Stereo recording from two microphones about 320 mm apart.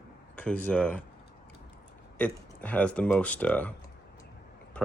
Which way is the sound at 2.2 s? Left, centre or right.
Centre.